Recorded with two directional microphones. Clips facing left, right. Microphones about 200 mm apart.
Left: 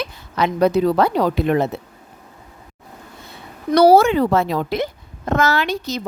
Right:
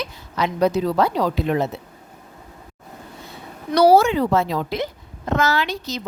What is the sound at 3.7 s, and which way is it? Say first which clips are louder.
A woman's voice: left 2 dB; 55° left (ahead or behind).